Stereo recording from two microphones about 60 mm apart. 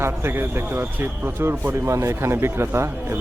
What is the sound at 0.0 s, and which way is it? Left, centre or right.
A man's voice, right.